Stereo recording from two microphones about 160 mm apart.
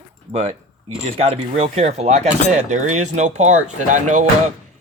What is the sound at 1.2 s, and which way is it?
Speech, 40° right (ahead or behind).